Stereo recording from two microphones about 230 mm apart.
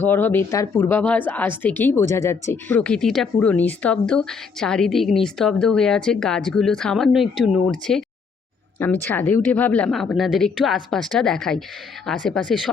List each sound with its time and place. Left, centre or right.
0.0 s speech: centre